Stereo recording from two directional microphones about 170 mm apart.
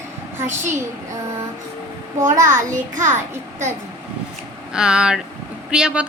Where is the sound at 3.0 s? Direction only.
45° right (ahead or behind).